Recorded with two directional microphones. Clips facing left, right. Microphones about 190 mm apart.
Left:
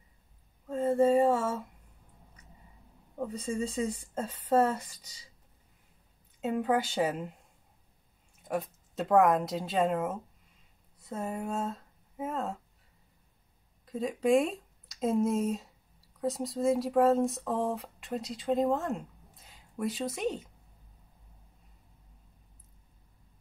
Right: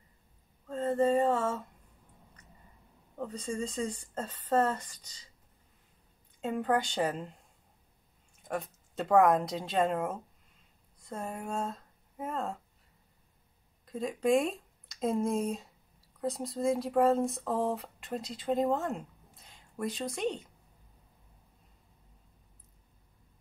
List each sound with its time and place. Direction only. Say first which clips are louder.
0.7 s a sound: left 3 dB; 10° left (ahead or behind)
3.2 s speech: left 2 dB; 5° left (ahead or behind)
6.4 s speech: left 1 dB; 5° left (ahead or behind)
8.5 s speech: left 3 dB; 5° left (ahead or behind)
13.8 s speech: left 1 dB; centre (ahead or behind)